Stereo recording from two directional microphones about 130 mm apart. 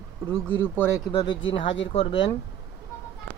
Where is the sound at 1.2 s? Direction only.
40° left (ahead or behind).